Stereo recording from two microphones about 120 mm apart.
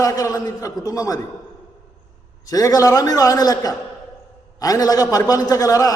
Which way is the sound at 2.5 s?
30° left (ahead or behind).